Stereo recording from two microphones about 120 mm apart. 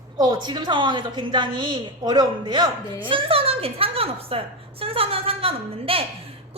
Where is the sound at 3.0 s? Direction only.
50° right (ahead or behind).